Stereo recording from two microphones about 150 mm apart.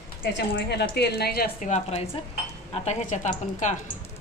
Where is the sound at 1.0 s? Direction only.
90° left.